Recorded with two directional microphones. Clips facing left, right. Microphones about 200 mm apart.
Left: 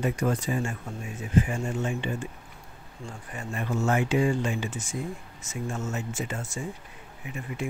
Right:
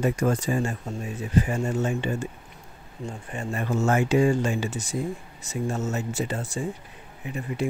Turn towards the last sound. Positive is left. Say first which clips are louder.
# right 5 dB
turn(degrees=-35)  # may be behind; listen again after turning